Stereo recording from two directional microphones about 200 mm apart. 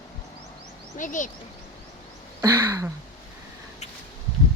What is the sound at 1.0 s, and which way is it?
Speech, 40° left (ahead or behind).